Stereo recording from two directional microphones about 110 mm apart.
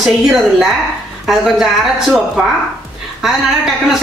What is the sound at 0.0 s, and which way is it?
A woman's voice, 5° right (ahead or behind).